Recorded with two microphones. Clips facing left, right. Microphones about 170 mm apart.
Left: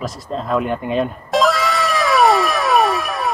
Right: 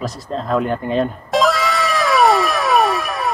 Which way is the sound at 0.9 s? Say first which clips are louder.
Right 1 dB; centre (ahead or behind).